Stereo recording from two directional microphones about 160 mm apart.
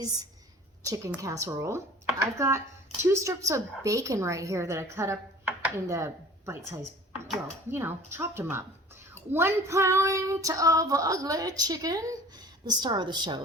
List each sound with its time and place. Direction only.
0.9 s female singing: 20° right (ahead or behind)
3.0 s a woman's voice: 15° right (ahead or behind)
9.1 s female singing: 15° right (ahead or behind)